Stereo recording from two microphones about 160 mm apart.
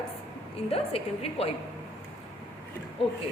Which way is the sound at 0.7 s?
40° left (ahead or behind).